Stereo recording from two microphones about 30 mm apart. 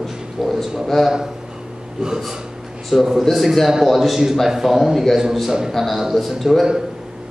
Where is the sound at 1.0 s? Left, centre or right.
Centre.